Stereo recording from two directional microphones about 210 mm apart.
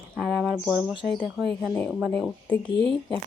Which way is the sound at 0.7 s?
10° right (ahead or behind).